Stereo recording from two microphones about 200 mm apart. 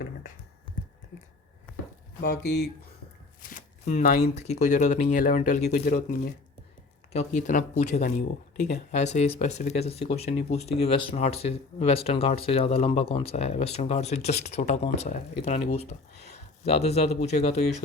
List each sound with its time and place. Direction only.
2.2 s speech: 55° left (ahead or behind)
3.4 s speech: 40° left (ahead or behind)